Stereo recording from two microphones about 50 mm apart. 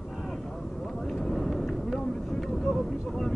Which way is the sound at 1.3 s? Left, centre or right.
Centre.